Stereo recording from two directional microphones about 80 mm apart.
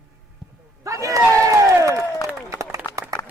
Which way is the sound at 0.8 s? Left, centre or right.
Right.